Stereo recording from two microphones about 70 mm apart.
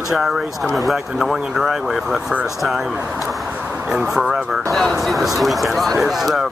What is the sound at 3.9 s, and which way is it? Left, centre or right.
Speech, centre.